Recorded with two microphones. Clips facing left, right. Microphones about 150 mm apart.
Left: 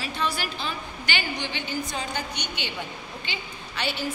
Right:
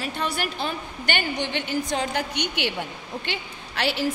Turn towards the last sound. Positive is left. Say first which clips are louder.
# right 5 dB
turn(degrees=-90)